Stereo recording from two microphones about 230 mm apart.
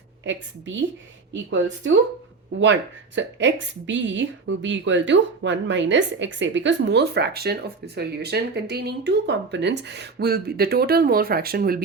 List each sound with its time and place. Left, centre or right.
0.3 s a woman's voice: right
3.2 s a woman's voice: right